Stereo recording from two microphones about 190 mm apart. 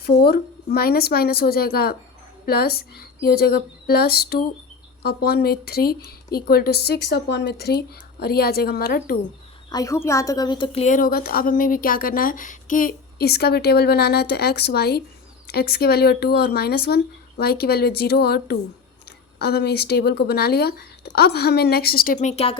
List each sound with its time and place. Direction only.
0.2 s a woman's voice: 55° left (ahead or behind)
9.6 s a woman's voice: 20° left (ahead or behind); by 22.5 s 35° left (ahead or behind)